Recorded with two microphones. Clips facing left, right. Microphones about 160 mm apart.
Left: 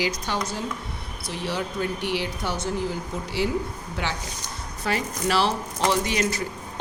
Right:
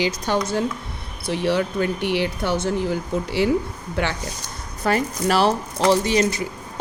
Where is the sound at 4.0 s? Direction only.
60° right (ahead or behind).